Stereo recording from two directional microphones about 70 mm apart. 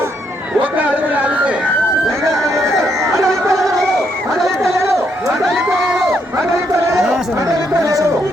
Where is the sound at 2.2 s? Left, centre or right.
Right.